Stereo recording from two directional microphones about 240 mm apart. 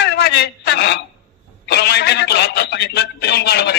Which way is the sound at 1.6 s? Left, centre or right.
Left.